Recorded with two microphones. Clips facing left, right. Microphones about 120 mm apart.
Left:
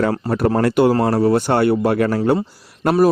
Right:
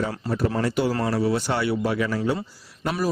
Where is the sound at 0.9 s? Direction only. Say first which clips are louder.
Left 8 dB; 50° left (ahead or behind).